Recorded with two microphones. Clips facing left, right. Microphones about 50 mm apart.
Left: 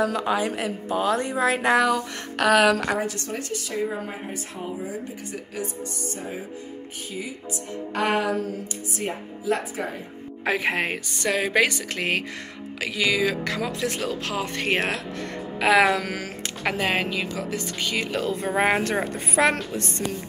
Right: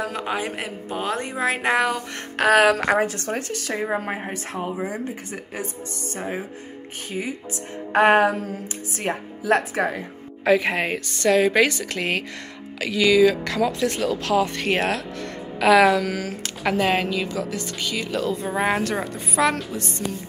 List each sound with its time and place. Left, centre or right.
0.0 s a woman's voice: right
5.3 s a woman's voice: right
6.1 s speech: right
7.9 s a woman's voice: right
8.9 s speech: right
10.6 s speech: centre
17.4 s speech: left
19.1 s speech: left